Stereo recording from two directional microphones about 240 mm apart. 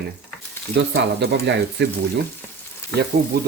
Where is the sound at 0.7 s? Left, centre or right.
Right.